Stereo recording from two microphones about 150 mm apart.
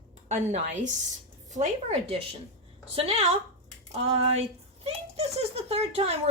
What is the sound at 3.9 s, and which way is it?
A child's voice, 45° right (ahead or behind).